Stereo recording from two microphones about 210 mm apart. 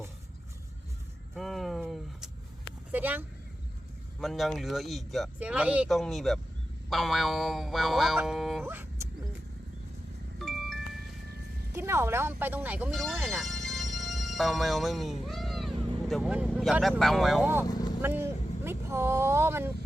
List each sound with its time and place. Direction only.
1.4 s a sound: centre (ahead or behind)
2.9 s speech: 10° right (ahead or behind)
8.6 s speech: 10° right (ahead or behind)
10.3 s music: centre (ahead or behind)
11.7 s speech: 10° right (ahead or behind)
15.7 s vehicle: 25° right (ahead or behind)
16.0 s speech: centre (ahead or behind)
17.7 s vehicle: 20° left (ahead or behind)
18.0 s vehicle: 10° right (ahead or behind)